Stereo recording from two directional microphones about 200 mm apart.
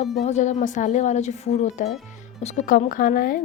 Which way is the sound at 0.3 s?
35° left (ahead or behind).